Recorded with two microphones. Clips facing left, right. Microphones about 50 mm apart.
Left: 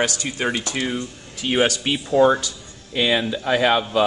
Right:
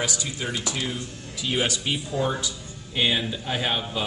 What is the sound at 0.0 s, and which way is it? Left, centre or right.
Speech, left.